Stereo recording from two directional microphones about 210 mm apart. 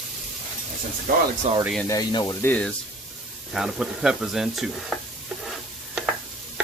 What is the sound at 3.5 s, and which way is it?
Speech, centre (ahead or behind).